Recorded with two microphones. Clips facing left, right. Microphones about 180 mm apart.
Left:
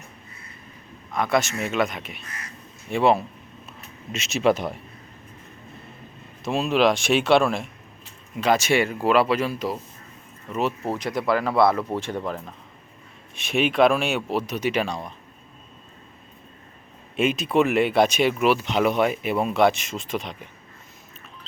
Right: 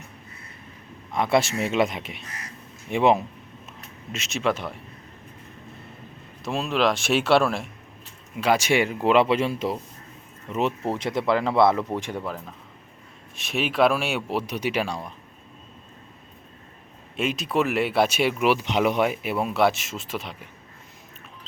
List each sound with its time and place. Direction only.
1.1 s speech: 25° right (ahead or behind)
4.1 s speech: centre (ahead or behind)
6.4 s speech: centre (ahead or behind); by 9.7 s 25° right (ahead or behind)
10.9 s speech: 25° right (ahead or behind); by 15.1 s 10° right (ahead or behind)
17.2 s speech: centre (ahead or behind)